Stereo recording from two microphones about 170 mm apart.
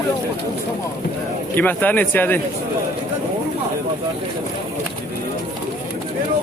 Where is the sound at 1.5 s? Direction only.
10° left (ahead or behind).